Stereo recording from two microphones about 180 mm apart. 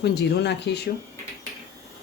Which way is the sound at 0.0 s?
65° left (ahead or behind).